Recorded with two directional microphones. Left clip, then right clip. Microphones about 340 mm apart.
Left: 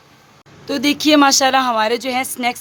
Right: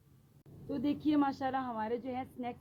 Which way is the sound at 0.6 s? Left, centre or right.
Left.